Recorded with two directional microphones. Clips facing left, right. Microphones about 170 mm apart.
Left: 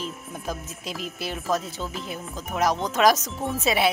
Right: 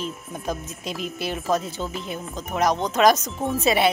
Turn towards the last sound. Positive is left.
turn(degrees=0)  # may be behind; listen again after turning